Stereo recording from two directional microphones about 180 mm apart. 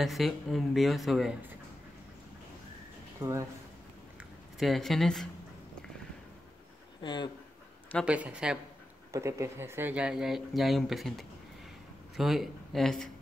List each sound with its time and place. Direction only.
0.0 s speech: centre (ahead or behind)
3.2 s speech: 15° right (ahead or behind)
4.2 s speech: centre (ahead or behind)
7.0 s speech: 25° left (ahead or behind)
8.0 s speech: 5° right (ahead or behind)
9.1 s speech: 15° right (ahead or behind); by 13.1 s 5° left (ahead or behind)